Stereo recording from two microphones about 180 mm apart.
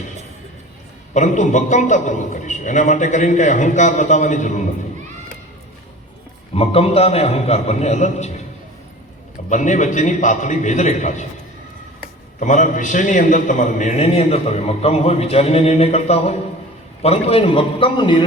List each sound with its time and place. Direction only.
1.1 s a man's voice: 40° left (ahead or behind)
6.6 s a man's voice: 35° left (ahead or behind)
9.5 s a man's voice: 40° left (ahead or behind)
12.4 s a man's voice: 45° left (ahead or behind); by 18.3 s 25° left (ahead or behind)